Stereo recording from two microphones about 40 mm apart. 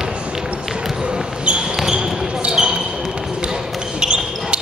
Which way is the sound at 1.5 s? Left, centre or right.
Right.